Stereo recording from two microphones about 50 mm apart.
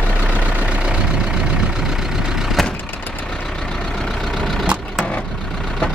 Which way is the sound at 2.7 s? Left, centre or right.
Left.